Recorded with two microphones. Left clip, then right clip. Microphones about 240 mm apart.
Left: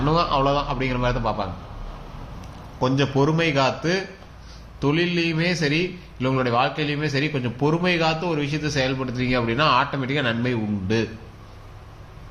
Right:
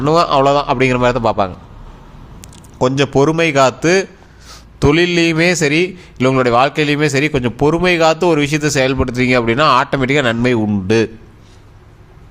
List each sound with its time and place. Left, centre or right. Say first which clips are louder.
0.0 s a man's voice: right 9 dB; right
2.7 s a man's voice: right 8 dB; right